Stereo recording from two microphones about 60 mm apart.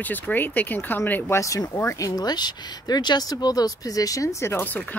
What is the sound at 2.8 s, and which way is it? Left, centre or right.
Speech, left.